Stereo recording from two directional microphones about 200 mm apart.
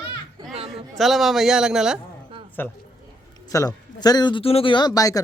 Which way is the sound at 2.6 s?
10° left (ahead or behind).